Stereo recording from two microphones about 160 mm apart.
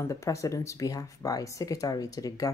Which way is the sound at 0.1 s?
20° left (ahead or behind).